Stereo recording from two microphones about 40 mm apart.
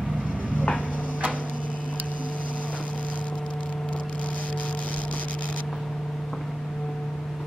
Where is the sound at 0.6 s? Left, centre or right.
Left.